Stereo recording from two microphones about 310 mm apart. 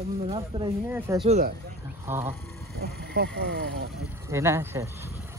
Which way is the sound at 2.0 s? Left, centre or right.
Centre.